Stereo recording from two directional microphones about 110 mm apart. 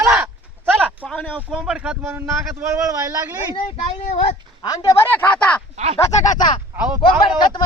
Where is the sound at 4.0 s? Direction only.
80° left.